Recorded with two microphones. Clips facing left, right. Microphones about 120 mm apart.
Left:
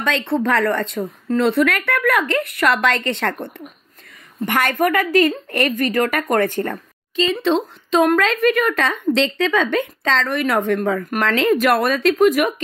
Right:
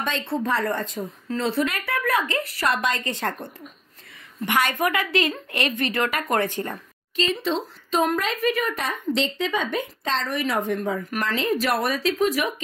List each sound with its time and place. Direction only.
0.0 s a woman's voice: 75° left (ahead or behind)
1.3 s a woman's voice: 60° left (ahead or behind)
4.5 s a woman's voice: 50° left (ahead or behind)
7.3 s a woman's voice: 65° left (ahead or behind)